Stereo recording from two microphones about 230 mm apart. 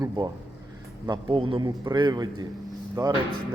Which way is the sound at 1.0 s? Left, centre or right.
Right.